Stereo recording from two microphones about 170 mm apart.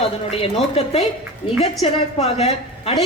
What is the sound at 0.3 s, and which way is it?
A woman's voice, 35° left (ahead or behind).